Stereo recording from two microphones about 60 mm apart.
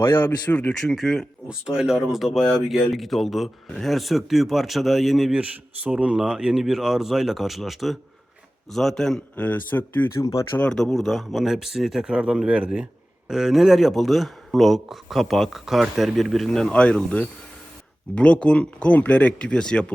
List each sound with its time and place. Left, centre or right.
0.2 s speech: left
0.7 s speech: centre
1.5 s speech: centre
5.9 s speech: centre
9.3 s speech: left
10.2 s speech: left
10.8 s speech: centre
16.5 s speech: centre